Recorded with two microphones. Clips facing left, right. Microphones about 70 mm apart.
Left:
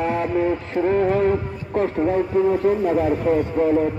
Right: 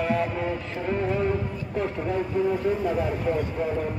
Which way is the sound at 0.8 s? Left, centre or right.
Left.